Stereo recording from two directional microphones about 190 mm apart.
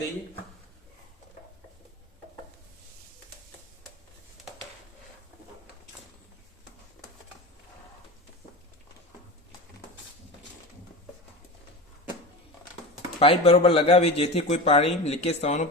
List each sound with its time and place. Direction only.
13.1 s a man's voice: 30° left (ahead or behind)